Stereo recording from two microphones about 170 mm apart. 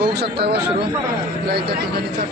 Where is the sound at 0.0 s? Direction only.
70° right (ahead or behind).